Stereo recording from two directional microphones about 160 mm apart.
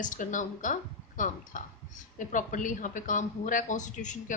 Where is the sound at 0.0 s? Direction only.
55° left (ahead or behind).